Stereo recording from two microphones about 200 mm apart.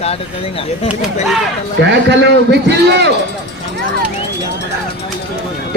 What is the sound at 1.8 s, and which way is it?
A man's voice, 60° right (ahead or behind).